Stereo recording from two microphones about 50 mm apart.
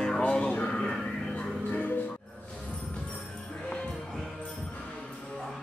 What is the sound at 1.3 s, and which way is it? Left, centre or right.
Music, left.